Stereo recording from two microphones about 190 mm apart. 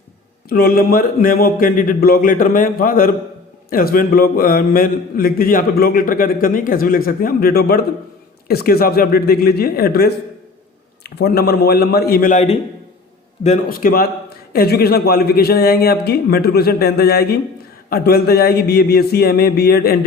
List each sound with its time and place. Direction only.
0.5 s a man's voice: 50° left (ahead or behind)